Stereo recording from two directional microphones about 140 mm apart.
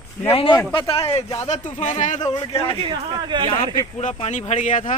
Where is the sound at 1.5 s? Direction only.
60° left (ahead or behind).